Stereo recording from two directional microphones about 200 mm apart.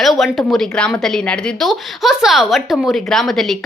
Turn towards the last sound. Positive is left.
turn(degrees=0)  # may be behind; listen again after turning